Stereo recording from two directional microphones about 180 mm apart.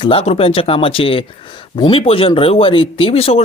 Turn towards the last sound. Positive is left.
turn(degrees=35)  # may be behind; listen again after turning